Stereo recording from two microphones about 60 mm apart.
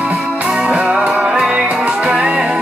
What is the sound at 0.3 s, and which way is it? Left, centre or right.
Music, centre.